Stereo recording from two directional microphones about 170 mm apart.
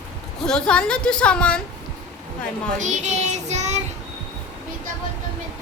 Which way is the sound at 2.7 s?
45° right (ahead or behind).